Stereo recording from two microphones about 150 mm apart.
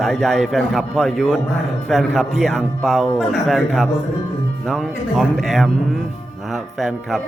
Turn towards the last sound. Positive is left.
turn(degrees=0)  # may be behind; listen again after turning